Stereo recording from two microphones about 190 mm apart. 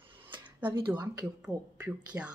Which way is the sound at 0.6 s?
10° right (ahead or behind).